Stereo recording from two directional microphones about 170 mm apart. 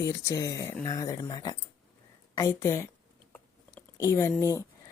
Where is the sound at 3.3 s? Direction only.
15° left (ahead or behind).